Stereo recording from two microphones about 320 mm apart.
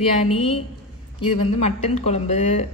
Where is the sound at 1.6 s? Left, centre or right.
Left.